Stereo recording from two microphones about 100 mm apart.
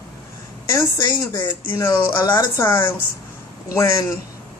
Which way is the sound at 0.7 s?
35° left (ahead or behind).